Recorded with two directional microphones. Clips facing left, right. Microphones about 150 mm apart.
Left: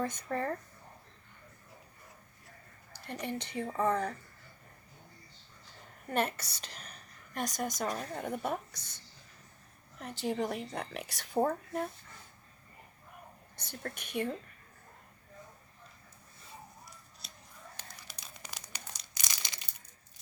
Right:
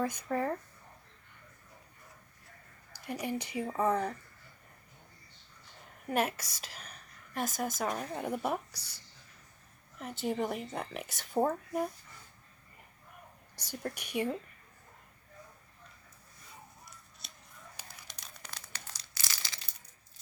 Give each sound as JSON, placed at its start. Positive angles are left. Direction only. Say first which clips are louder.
{"t": 0.0, "sound": "speech", "louder": "right 2 dB", "side_deg": -10}
{"t": 3.1, "sound": "speech", "louder": "right 2 dB", "side_deg": -10}
{"t": 6.1, "sound": "a woman's voice", "louder": "right 1 dB", "side_deg": -10}
{"t": 10.0, "sound": "a woman's voice", "louder": "even", "side_deg": 0}
{"t": 13.7, "sound": "speech", "louder": "right 3 dB", "side_deg": -10}
{"t": 17.8, "sound": "crumpling", "louder": "left 1 dB", "side_deg": -10}
{"t": 18.4, "sound": "crumpling", "louder": "left 1 dB", "side_deg": 15}